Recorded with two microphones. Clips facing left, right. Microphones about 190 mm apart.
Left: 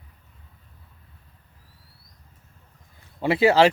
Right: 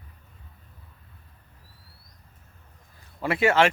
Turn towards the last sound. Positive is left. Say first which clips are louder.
# left 4 dB
turn(degrees=35)  # may be behind; listen again after turning